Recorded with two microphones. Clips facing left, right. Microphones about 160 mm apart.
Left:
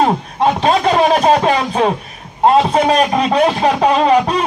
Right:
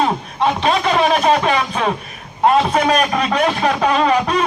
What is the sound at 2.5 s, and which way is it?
A man's voice, 30° left (ahead or behind).